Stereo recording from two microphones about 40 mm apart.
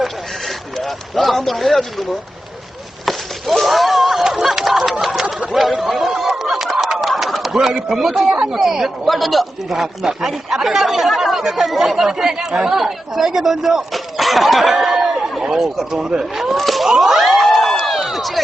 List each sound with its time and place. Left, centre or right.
0.0 s a sound: centre
3.1 s speech: centre
5.2 s bird: right
5.7 s a sound: centre
6.7 s bird: centre
7.9 s a man's voice: centre
9.7 s speech: centre
13.9 s a sound: centre
15.5 s a man's voice: centre
16.0 s speech: centre
16.6 s a sound: centre
18.0 s run: centre